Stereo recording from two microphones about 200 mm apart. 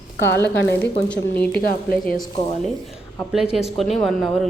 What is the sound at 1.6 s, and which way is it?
Speech, 45° left (ahead or behind).